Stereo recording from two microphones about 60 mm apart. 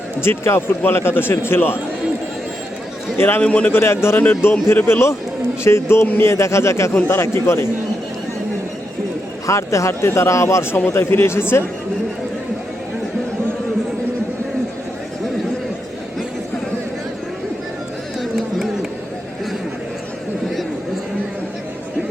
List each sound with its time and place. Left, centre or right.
0.2 s a man's voice: left
3.2 s a man's voice: left
3.4 s a man's voice: left
3.7 s a man's voice: left
9.5 s a man's voice: left
18.2 s a sound: centre